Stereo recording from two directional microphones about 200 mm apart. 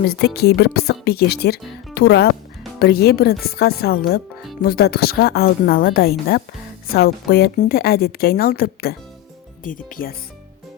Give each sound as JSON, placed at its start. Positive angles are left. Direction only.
{"t": 0.0, "sound": "a woman's voice", "side_deg": 55}